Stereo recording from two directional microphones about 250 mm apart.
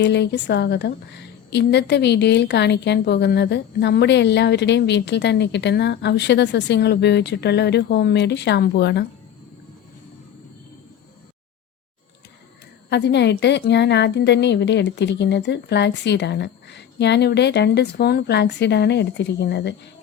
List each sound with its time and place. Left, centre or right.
0.0 s a woman's voice: left
12.9 s a woman's voice: left